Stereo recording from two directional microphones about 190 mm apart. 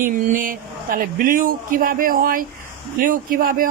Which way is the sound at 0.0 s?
45° right (ahead or behind).